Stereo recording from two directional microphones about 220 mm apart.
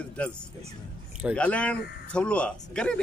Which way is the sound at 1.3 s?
5° left (ahead or behind).